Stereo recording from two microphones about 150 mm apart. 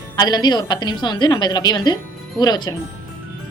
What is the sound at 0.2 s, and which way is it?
A woman's voice, 30° left (ahead or behind).